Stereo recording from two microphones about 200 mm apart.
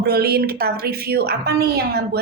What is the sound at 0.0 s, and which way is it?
Speech, 50° right (ahead or behind).